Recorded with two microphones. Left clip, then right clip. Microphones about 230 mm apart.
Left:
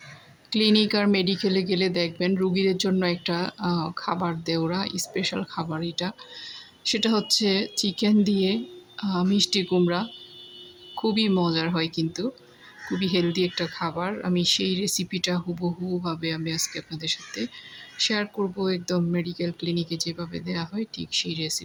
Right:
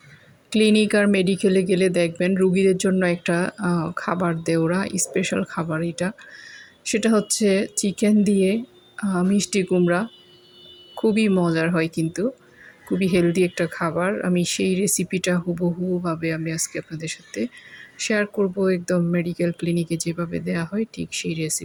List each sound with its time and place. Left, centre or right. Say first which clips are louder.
0.5 s speech: right 4 dB; centre